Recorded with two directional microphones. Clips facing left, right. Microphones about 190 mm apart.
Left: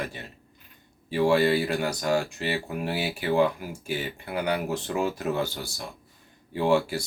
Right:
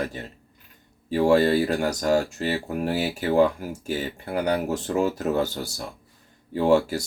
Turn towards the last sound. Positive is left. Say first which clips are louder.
# right 3 dB
turn(degrees=-40)  # may be behind; listen again after turning